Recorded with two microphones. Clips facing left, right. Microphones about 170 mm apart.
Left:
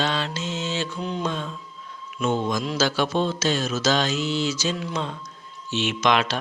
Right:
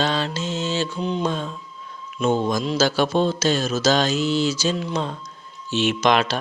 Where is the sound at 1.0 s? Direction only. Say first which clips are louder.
Right 4 dB; 20° right (ahead or behind).